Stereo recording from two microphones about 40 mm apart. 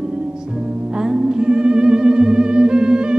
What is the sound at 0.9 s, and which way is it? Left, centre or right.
Music, centre.